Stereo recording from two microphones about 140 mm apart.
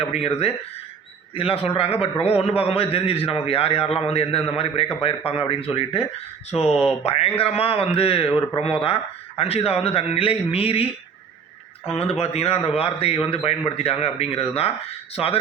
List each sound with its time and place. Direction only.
0.1 s a man's voice: 45° left (ahead or behind)
11.9 s a man's voice: 50° left (ahead or behind)